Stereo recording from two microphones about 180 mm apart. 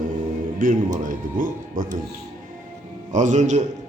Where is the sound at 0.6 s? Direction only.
50° right (ahead or behind).